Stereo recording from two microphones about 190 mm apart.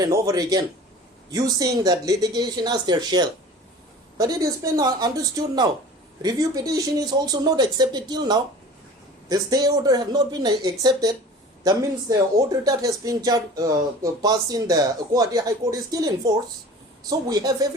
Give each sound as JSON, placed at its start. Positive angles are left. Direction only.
{"t": 0.0, "sound": "speech", "side_deg": -20}